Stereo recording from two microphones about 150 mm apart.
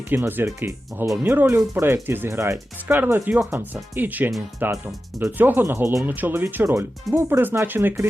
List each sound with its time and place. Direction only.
0.1 s speech: 15° right (ahead or behind)